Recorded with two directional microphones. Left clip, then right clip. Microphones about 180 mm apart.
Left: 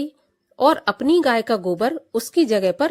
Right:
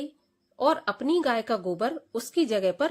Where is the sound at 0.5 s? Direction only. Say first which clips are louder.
Left 8 dB; 40° left (ahead or behind).